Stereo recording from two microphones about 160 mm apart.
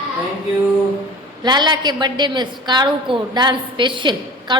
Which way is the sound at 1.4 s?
25° right (ahead or behind).